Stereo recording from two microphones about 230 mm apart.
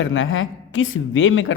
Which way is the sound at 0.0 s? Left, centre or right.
Left.